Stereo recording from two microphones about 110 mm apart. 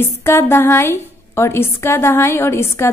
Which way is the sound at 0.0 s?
20° left (ahead or behind).